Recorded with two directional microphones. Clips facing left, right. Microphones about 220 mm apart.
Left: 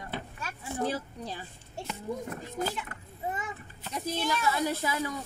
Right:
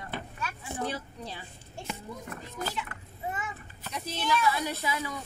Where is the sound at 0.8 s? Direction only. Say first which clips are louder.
Left 4 dB; 45° left (ahead or behind).